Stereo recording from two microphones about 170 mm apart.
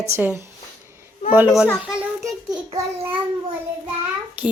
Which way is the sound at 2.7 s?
30° right (ahead or behind).